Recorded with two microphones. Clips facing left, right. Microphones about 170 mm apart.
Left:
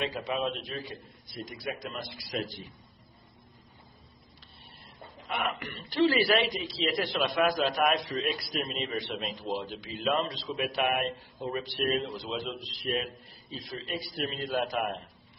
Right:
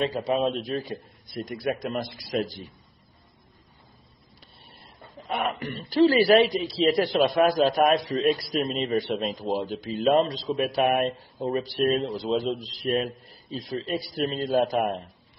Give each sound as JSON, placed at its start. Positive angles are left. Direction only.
{"t": 0.0, "sound": "a man's voice", "side_deg": -35}
{"t": 1.3, "sound": "a man's voice", "side_deg": -50}
{"t": 2.3, "sound": "a man's voice", "side_deg": -40}
{"t": 5.3, "sound": "a man's voice", "side_deg": -35}